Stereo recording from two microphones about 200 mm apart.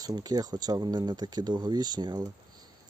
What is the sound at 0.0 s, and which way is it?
Speech, 20° right (ahead or behind).